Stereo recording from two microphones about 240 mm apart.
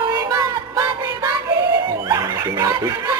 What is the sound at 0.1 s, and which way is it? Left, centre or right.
Music, centre.